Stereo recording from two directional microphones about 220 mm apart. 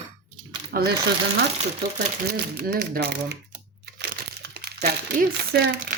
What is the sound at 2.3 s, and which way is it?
Crumpling, 50° right (ahead or behind).